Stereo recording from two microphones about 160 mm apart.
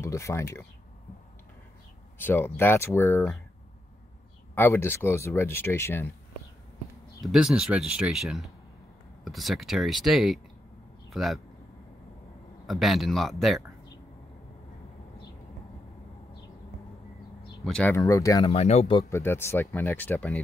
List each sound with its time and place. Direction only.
0.0 s speech: 15° left (ahead or behind)
2.1 s speech: 15° left (ahead or behind)
4.6 s speech: 15° left (ahead or behind)
7.2 s speech: 5° right (ahead or behind)
12.6 s speech: centre (ahead or behind)
17.6 s speech: 5° left (ahead or behind)
17.9 s speech: 20° left (ahead or behind)
18.4 s speech: 40° left (ahead or behind)
18.9 s speech: 15° left (ahead or behind)